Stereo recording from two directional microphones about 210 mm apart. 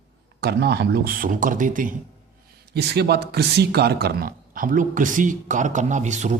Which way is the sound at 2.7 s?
50° right (ahead or behind).